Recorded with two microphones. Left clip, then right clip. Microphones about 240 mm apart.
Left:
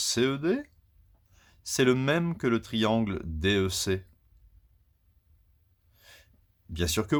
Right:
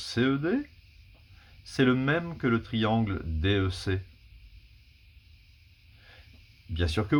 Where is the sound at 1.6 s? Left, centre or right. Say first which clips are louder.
Left 1 dB; left.